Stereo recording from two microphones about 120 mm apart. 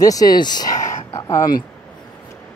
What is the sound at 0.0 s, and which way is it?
Speech, 30° left (ahead or behind).